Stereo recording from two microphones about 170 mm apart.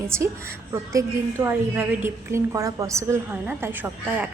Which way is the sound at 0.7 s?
15° right (ahead or behind).